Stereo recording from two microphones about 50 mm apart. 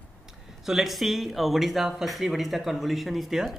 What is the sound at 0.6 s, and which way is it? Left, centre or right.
Speech, centre.